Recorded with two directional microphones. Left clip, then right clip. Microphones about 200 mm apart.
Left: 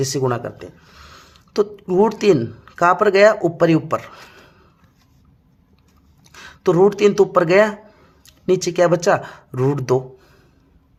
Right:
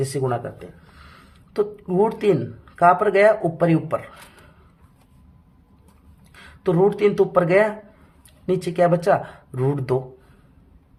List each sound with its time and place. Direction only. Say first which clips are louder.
0.0 s speech: left 3 dB; 30° left (ahead or behind)
6.3 s speech: left 5 dB; 30° left (ahead or behind)